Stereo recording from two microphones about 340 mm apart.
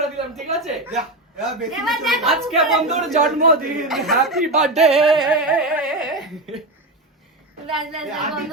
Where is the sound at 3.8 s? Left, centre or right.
Centre.